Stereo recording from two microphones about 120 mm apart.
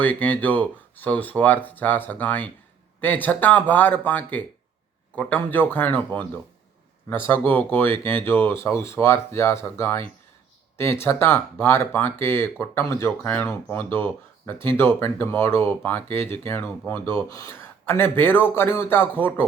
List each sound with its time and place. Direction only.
0.0 s speech: 15° left (ahead or behind)